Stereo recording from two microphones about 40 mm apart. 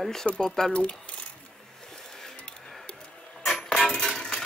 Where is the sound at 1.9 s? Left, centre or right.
Centre.